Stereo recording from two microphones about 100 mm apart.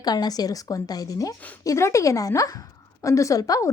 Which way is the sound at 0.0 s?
40° left (ahead or behind).